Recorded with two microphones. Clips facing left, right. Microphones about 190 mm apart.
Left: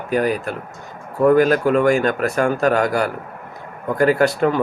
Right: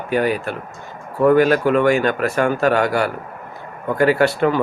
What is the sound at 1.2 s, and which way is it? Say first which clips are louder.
Speech: even; 40° left (ahead or behind).